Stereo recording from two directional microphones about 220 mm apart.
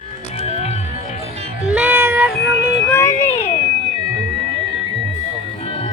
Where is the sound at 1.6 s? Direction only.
5° right (ahead or behind).